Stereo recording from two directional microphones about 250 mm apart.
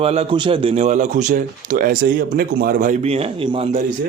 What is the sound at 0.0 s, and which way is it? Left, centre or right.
Speech, right.